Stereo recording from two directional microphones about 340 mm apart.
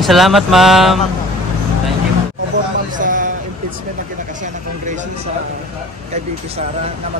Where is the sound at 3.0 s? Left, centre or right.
Right.